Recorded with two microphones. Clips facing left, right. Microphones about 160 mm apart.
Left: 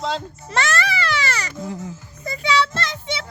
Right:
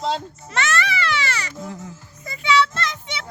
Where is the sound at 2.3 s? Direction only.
35° left (ahead or behind).